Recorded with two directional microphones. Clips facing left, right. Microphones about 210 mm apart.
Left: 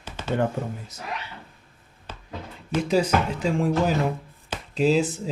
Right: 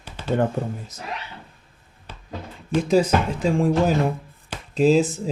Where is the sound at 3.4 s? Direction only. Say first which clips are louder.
Right 5 dB; 50° right (ahead or behind).